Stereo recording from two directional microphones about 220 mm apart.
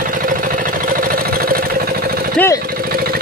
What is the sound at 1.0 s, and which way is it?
Engine, 40° right (ahead or behind).